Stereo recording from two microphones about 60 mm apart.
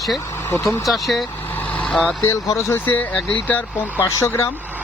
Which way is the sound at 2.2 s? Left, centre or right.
Left.